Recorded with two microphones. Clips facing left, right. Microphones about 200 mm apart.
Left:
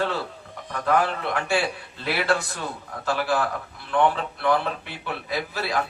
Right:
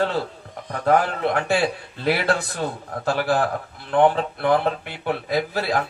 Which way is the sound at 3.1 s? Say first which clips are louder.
Right 3 dB; 50° right (ahead or behind).